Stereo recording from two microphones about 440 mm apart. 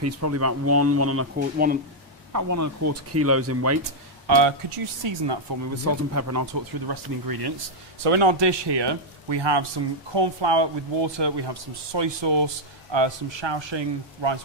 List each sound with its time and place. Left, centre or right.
0.0 s speech: right
2.3 s speech: right
4.4 s speech: right
6.1 s speech: right
6.9 s speech: right
8.1 s speech: right